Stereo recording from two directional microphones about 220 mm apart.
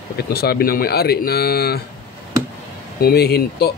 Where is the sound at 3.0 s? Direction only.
45° left (ahead or behind).